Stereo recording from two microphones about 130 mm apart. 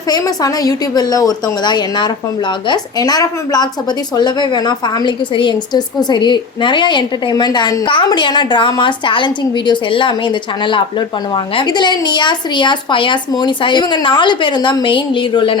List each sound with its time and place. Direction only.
0.1 s a woman's voice: 30° left (ahead or behind)